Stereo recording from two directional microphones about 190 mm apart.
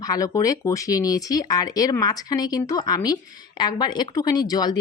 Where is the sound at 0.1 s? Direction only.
20° left (ahead or behind).